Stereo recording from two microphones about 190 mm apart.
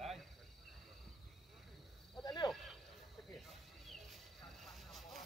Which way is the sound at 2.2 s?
20° left (ahead or behind).